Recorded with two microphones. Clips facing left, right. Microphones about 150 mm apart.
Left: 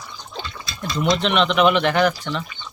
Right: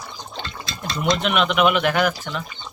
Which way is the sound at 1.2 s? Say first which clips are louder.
Left 2 dB; 5° right (ahead or behind).